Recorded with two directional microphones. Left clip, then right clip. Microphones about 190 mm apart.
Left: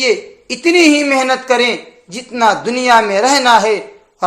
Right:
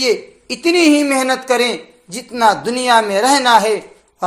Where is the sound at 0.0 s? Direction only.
30° right (ahead or behind).